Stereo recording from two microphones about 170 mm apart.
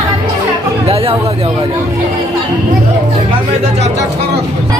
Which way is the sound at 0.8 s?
35° right (ahead or behind).